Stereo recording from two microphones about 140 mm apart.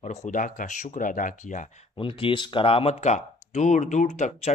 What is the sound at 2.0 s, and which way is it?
Speech, 40° left (ahead or behind).